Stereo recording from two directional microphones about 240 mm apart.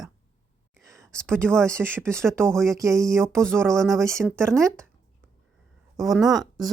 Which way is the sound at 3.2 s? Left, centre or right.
Centre.